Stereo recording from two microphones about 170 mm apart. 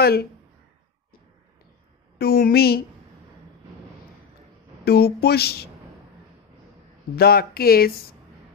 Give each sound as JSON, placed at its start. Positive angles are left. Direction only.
{"t": 0.0, "sound": "speech", "side_deg": 65}
{"t": 2.1, "sound": "speech", "side_deg": 65}
{"t": 4.8, "sound": "speech", "side_deg": 70}
{"t": 7.2, "sound": "speech", "side_deg": 60}